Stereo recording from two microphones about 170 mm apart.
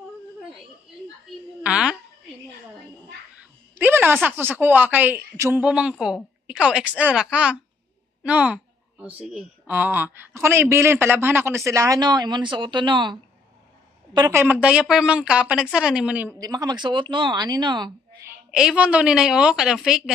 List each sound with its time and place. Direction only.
1.6 s a sound: 5° right (ahead or behind)
3.7 s music: 10° right (ahead or behind)
4.6 s speech: 10° right (ahead or behind)
16.3 s speech: 20° right (ahead or behind)
18.5 s a woman's voice: 5° right (ahead or behind)